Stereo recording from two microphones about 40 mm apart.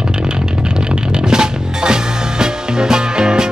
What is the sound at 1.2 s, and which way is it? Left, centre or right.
Music, centre.